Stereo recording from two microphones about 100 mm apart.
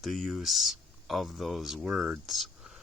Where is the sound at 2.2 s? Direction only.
Centre (ahead or behind).